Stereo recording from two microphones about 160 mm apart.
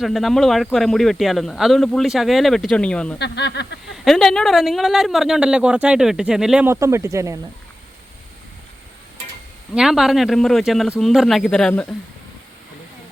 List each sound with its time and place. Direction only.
0.0 s speech: centre (ahead or behind)
3.2 s speech: 90° left
4.0 s speech: centre (ahead or behind)
6.7 s speech: 20° right (ahead or behind)
9.7 s speech: centre (ahead or behind)